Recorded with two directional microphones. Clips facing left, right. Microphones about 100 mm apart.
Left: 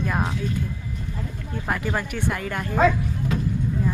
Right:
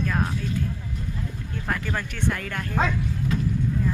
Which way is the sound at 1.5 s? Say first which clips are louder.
Left 3 dB; 15° left (ahead or behind).